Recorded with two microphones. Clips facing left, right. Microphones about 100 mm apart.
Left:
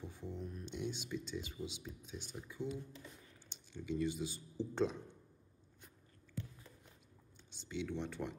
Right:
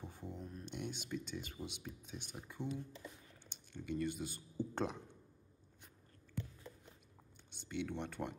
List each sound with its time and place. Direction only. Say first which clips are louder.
0.0 s speech: left 2 dB; 45° right (ahead or behind)
0.7 s speech: left 2 dB; 55° right (ahead or behind)
7.5 s speech: even; 55° right (ahead or behind)